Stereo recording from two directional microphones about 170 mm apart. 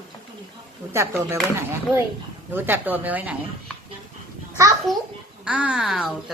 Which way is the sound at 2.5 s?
10° right (ahead or behind).